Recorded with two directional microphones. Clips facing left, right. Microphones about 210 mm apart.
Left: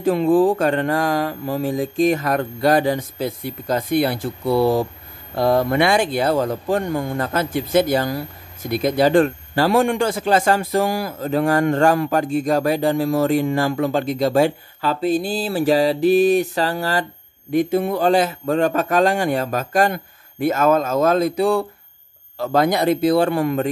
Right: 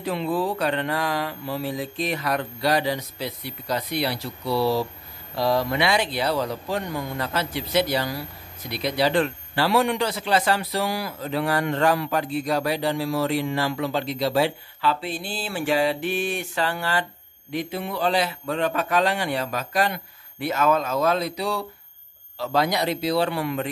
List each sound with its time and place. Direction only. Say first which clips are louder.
0.0 s speech: left 10 dB; 45° left (ahead or behind)